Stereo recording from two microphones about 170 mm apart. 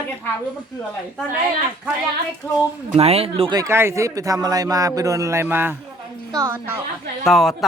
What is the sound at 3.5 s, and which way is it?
A woman's voice, 15° right (ahead or behind).